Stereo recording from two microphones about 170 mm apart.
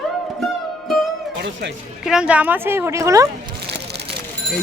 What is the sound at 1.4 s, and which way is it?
Speech, 90° right.